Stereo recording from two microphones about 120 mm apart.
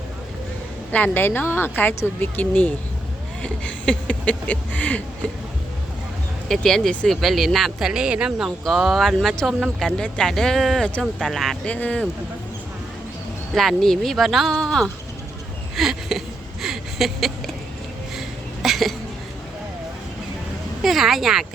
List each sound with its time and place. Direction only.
0.9 s speech: 15° left (ahead or behind)
6.5 s speech: 5° left (ahead or behind)
13.5 s speech: centre (ahead or behind)
15.7 s a sound: centre (ahead or behind)
20.8 s speech: centre (ahead or behind)